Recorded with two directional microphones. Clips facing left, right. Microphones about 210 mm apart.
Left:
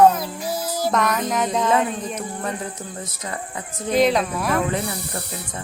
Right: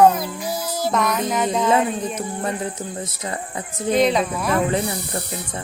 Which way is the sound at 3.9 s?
Centre (ahead or behind).